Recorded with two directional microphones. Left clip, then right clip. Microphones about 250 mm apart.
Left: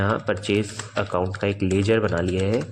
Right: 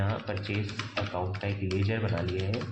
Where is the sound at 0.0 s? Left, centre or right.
Left.